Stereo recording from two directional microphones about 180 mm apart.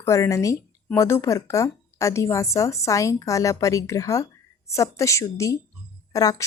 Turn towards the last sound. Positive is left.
turn(degrees=20)  # may be behind; listen again after turning